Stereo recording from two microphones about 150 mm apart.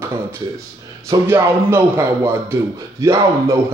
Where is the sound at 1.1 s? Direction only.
20° right (ahead or behind).